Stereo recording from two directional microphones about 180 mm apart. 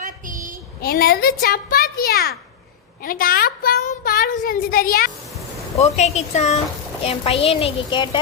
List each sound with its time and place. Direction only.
0.0 s child singing: 45° right (ahead or behind)
0.8 s a child's voice: 55° left (ahead or behind)
5.7 s a woman's voice: 35° left (ahead or behind)